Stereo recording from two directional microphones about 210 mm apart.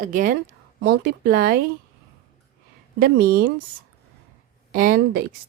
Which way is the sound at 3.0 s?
45° right (ahead or behind).